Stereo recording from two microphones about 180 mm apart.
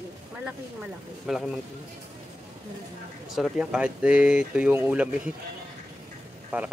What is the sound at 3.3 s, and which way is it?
Speech, 5° right (ahead or behind).